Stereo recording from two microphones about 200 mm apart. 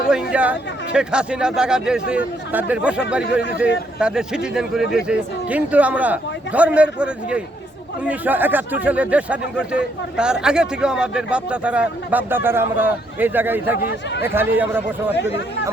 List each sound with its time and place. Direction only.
0.1 s a man's voice: 5° right (ahead or behind)
13.8 s speech: 55° left (ahead or behind)
14.3 s speech: 10° right (ahead or behind)